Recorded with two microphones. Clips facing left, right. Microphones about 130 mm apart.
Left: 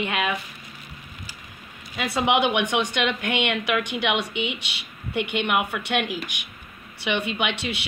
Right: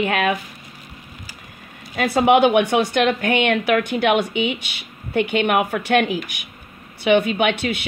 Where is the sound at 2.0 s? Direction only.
45° right (ahead or behind).